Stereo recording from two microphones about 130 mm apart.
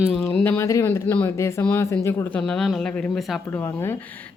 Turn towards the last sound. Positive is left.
turn(degrees=15)  # may be behind; listen again after turning